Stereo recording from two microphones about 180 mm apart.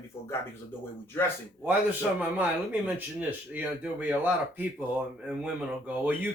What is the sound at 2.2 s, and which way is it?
Speech, 10° right (ahead or behind).